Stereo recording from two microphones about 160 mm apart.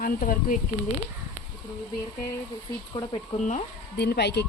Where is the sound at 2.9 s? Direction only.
30° left (ahead or behind).